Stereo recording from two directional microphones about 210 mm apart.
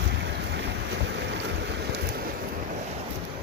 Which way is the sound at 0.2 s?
55° right (ahead or behind).